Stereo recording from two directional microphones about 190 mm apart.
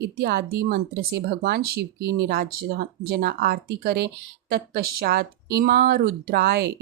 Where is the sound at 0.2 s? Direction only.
55° right (ahead or behind).